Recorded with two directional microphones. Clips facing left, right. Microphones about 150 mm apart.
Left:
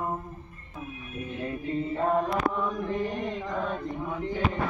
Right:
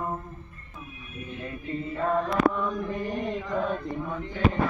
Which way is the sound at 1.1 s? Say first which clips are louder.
Left 3 dB; 45° left (ahead or behind).